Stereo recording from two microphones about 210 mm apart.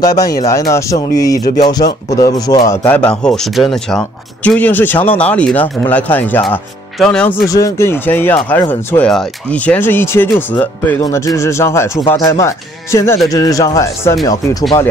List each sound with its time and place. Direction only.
0.0 s speech: 15° left (ahead or behind)
7.4 s speech: 15° left (ahead or behind)